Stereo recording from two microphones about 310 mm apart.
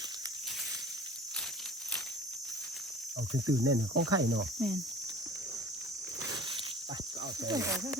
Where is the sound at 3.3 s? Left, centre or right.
Right.